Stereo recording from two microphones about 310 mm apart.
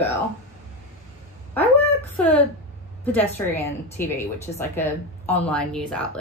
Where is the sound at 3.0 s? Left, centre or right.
Centre.